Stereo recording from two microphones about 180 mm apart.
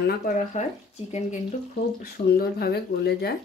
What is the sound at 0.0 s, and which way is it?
Speech, 55° left (ahead or behind).